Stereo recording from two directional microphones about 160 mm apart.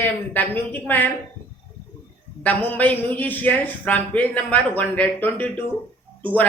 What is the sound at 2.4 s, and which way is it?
A man's voice, 10° left (ahead or behind).